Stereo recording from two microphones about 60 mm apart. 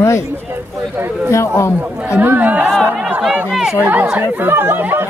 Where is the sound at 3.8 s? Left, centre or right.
Right.